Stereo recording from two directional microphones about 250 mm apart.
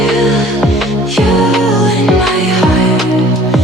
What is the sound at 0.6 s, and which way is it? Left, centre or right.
Music, centre.